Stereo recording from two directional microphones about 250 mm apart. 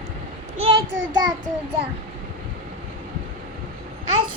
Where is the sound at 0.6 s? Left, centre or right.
Centre.